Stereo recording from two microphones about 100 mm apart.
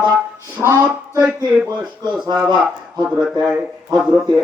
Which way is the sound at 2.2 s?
45° right (ahead or behind).